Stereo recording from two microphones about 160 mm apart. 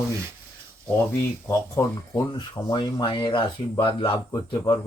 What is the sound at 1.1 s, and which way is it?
Speech, 15° left (ahead or behind).